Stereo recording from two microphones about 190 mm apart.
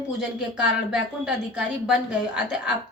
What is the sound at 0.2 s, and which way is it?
A woman's voice, 5° right (ahead or behind).